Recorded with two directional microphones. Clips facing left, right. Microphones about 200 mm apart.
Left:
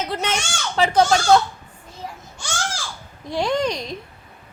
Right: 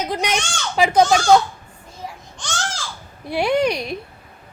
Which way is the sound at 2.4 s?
10° left (ahead or behind).